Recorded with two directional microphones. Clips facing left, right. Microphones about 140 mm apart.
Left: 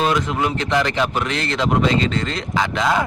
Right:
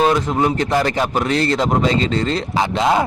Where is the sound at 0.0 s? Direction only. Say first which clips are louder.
Right 4 dB; 35° right (ahead or behind).